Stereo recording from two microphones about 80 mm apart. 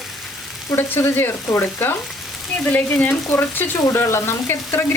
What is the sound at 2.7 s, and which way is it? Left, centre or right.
Speech, left.